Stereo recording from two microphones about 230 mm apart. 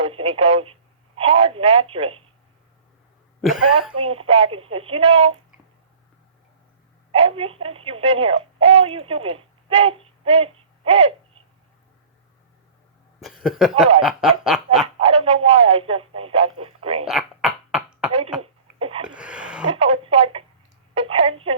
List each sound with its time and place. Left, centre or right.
0.0 s speech: right
4.1 s speech: right
7.1 s a woman's voice: right
13.1 s a sound: centre
14.0 s quack: centre
15.0 s speech: right
17.1 s cough: centre
18.4 s a sound: right
19.0 s a sound: centre
19.6 s speech: right